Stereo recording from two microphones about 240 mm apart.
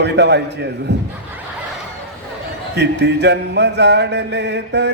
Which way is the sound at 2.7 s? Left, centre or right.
Right.